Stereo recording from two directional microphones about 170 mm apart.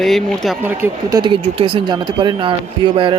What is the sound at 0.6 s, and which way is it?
Speech, 15° right (ahead or behind).